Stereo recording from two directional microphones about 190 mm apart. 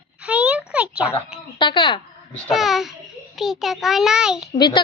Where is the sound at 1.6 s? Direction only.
25° left (ahead or behind).